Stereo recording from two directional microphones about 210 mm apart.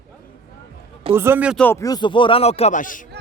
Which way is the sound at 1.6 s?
10° left (ahead or behind).